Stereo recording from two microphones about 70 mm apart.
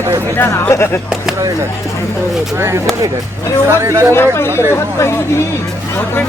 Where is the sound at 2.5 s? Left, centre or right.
Right.